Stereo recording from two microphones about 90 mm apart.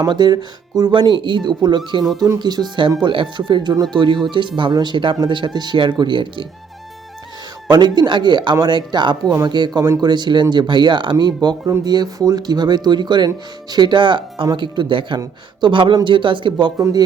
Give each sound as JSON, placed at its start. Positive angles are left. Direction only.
{"t": 0.0, "sound": "speech", "side_deg": -55}
{"t": 7.7, "sound": "speech", "side_deg": -50}
{"t": 16.7, "sound": "speech", "side_deg": -45}